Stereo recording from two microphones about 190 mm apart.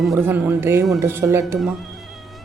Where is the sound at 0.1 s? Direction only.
10° right (ahead or behind).